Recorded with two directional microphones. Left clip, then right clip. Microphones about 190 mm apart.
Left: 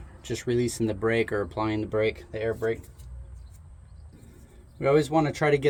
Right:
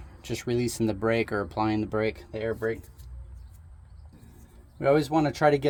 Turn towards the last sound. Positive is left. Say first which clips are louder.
# right 1 dB
turn(degrees=-35)  # may be behind; listen again after turning